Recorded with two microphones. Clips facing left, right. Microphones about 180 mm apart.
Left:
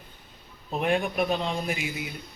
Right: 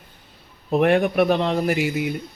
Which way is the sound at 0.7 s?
70° right (ahead or behind).